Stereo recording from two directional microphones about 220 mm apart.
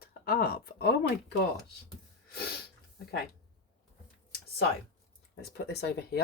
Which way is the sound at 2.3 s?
45° left (ahead or behind).